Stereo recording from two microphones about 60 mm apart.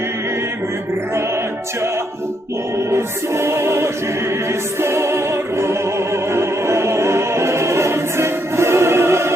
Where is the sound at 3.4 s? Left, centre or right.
Right.